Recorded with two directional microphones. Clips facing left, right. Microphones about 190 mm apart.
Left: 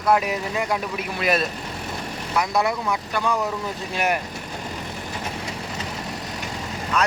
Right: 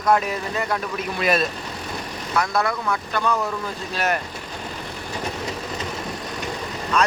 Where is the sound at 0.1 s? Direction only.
10° left (ahead or behind).